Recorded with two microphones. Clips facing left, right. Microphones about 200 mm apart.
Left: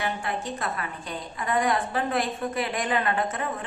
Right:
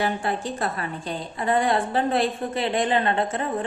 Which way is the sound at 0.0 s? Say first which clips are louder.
Right 4 dB; 35° right (ahead or behind).